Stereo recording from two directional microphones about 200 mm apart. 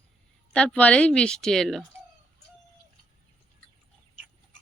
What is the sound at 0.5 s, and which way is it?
Speech, 5° left (ahead or behind).